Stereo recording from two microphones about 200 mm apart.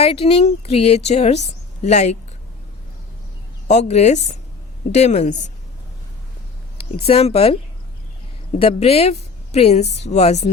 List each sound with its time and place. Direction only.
0.0 s a woman's voice: 30° left (ahead or behind)
3.7 s a woman's voice: 35° left (ahead or behind)
6.7 s a woman's voice: 30° left (ahead or behind)